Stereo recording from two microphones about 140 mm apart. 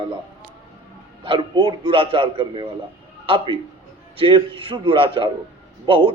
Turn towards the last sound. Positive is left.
turn(degrees=-35)  # may be behind; listen again after turning